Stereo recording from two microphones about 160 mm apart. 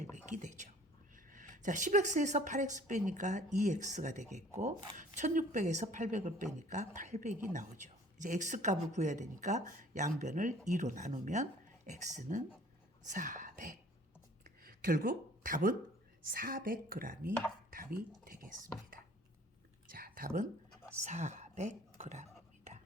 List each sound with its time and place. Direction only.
0.3 s whispering: 50° right (ahead or behind)
1.1 s a woman's voice: 55° right (ahead or behind)
14.4 s a sound: 65° right (ahead or behind)
16.3 s a woman's voice: 60° right (ahead or behind)
19.9 s a sound: 65° right (ahead or behind)
21.0 s whispering: 45° right (ahead or behind)